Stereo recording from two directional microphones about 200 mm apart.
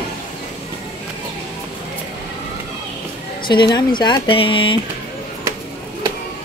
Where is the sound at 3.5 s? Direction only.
20° left (ahead or behind).